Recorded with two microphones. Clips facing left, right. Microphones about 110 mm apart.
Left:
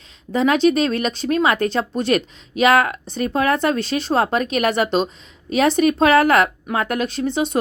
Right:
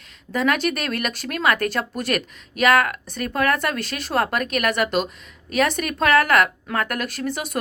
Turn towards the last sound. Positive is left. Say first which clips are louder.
# left 6 dB
turn(degrees=30)  # may be behind; listen again after turning